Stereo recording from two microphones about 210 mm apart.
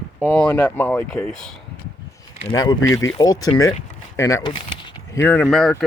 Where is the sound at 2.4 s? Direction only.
20° left (ahead or behind).